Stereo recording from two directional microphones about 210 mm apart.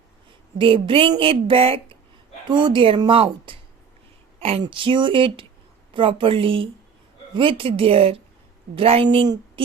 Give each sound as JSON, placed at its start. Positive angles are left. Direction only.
{"t": 0.6, "sound": "speech", "side_deg": -25}